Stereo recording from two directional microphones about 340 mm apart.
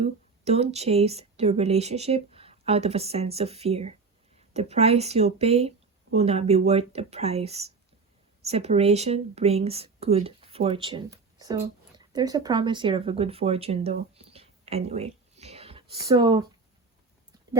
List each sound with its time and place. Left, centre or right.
0.0 s speech: centre